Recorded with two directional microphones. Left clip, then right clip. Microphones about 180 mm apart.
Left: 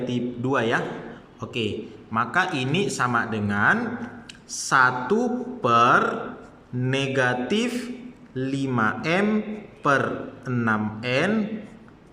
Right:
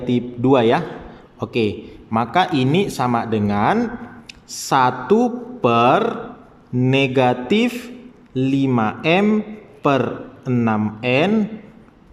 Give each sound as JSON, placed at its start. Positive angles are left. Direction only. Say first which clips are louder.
{"t": 0.0, "sound": "a man's voice", "louder": "right 7 dB", "side_deg": -25}